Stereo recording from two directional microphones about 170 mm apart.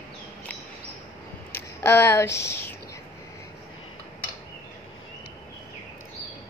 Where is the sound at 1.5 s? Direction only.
15° left (ahead or behind).